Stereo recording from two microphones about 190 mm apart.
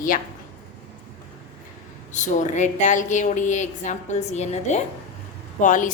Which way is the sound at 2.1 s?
40° left (ahead or behind).